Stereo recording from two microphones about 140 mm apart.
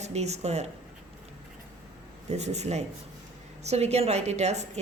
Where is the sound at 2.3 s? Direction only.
50° right (ahead or behind).